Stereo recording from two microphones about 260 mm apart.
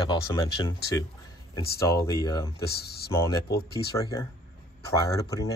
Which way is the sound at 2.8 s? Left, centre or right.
Left.